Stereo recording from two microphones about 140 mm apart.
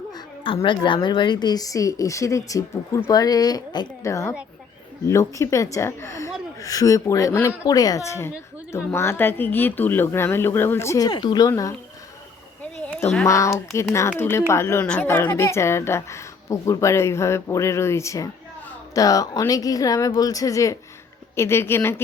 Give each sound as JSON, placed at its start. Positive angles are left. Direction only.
{"t": 0.1, "sound": "a woman's voice", "side_deg": 35}
{"t": 13.2, "sound": "a woman's voice", "side_deg": 20}